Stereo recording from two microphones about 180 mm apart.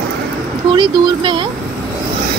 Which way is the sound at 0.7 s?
25° right (ahead or behind).